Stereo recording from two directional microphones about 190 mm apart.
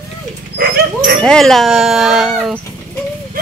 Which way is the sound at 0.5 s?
55° right (ahead or behind).